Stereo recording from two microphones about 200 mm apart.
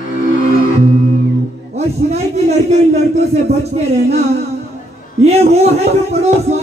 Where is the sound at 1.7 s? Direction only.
30° right (ahead or behind).